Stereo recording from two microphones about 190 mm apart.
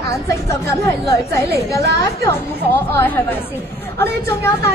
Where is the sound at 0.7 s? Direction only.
15° left (ahead or behind).